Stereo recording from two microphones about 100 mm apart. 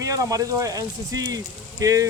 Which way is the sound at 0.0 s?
35° right (ahead or behind).